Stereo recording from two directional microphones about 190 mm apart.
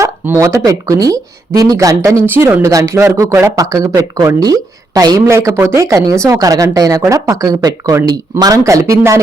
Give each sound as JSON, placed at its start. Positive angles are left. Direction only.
{"t": 0.0, "sound": "speech", "side_deg": -15}